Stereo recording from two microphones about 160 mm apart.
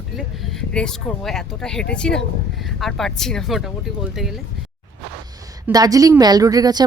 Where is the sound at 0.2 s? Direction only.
5° left (ahead or behind).